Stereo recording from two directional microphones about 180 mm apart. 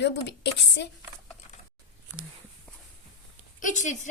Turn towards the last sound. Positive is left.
turn(degrees=45)  # may be behind; listen again after turning